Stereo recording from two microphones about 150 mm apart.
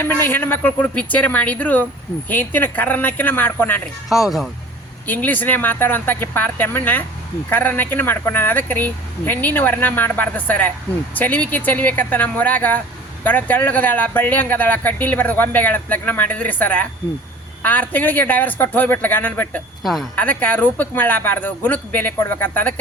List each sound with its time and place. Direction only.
0.0 s speech: 15° left (ahead or behind)
4.1 s speech: centre (ahead or behind)
5.0 s speech: 10° left (ahead or behind)
19.8 s speech: centre (ahead or behind)
20.4 s speech: 10° left (ahead or behind)